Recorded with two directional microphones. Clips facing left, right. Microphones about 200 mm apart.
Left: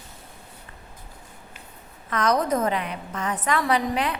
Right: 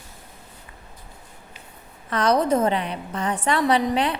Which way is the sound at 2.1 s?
30° right (ahead or behind).